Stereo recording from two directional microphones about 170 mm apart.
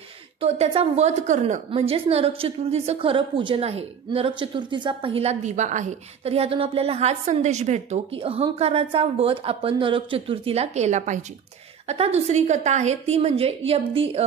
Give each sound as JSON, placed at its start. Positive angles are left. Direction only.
{"t": 0.4, "sound": "a woman's voice", "side_deg": -35}
{"t": 1.7, "sound": "a woman's voice", "side_deg": -35}